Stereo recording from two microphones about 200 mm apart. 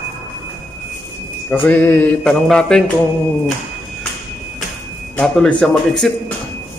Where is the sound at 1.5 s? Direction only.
10° left (ahead or behind).